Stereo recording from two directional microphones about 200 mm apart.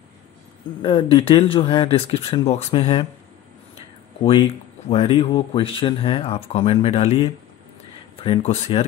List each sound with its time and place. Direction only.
0.8 s speech: 25° left (ahead or behind)
4.2 s speech: 25° left (ahead or behind)